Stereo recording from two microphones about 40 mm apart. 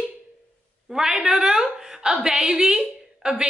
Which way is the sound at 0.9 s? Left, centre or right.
Centre.